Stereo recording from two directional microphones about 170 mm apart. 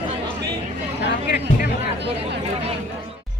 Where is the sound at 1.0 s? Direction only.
70° left (ahead or behind).